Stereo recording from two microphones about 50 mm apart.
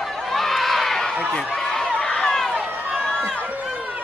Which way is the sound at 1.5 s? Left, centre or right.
Centre.